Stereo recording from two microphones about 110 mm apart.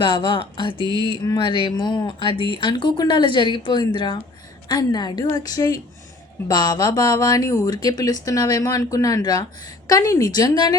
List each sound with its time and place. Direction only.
0.0 s a woman's voice: 45° left (ahead or behind)